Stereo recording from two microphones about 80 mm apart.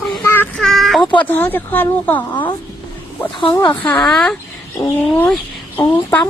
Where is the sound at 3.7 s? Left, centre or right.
Left.